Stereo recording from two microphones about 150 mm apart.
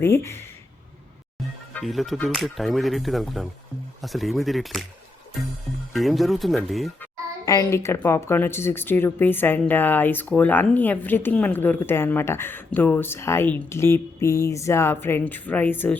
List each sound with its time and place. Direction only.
0.0 s speech: 15° left (ahead or behind)
1.8 s speech: centre (ahead or behind)
5.9 s speech: centre (ahead or behind)
7.4 s speech: 25° left (ahead or behind)